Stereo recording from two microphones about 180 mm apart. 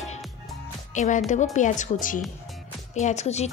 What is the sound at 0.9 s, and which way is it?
A woman's voice, 45° left (ahead or behind).